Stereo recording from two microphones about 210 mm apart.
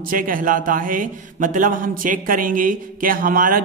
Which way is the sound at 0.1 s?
40° right (ahead or behind).